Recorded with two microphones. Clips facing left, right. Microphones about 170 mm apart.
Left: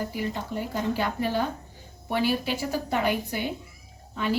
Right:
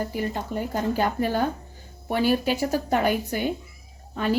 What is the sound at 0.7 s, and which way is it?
A woman's voice, 45° right (ahead or behind).